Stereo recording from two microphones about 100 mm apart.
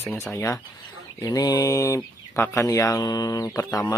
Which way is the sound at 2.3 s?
20° left (ahead or behind).